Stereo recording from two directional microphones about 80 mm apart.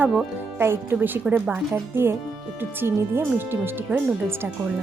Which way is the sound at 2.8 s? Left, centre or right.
Right.